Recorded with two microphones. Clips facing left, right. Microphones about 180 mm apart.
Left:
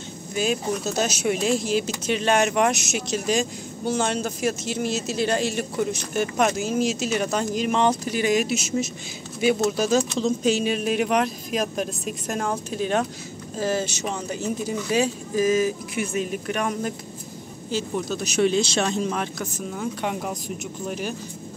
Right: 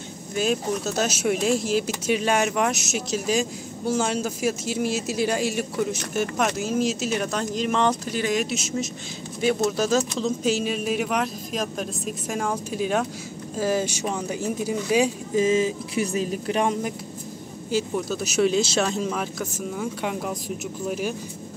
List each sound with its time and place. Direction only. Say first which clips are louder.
0.3 s speech: even; centre (ahead or behind)
15.3 s speech: even; 25° right (ahead or behind)
17.6 s speech: right 1 dB; 5° right (ahead or behind)